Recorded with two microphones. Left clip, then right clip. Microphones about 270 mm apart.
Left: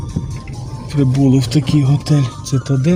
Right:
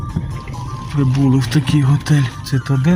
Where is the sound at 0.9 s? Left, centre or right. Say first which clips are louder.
Left 3 dB; centre.